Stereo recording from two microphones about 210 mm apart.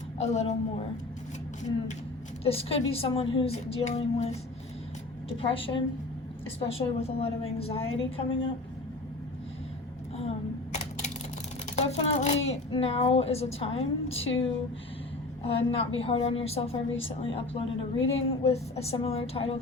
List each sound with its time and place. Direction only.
0.2 s speech: 30° left (ahead or behind)
2.4 s speech: 30° left (ahead or behind)
5.4 s speech: 25° left (ahead or behind)
10.2 s a sound: 30° left (ahead or behind)
11.8 s speech: 30° left (ahead or behind)
15.4 s speech: 25° left (ahead or behind)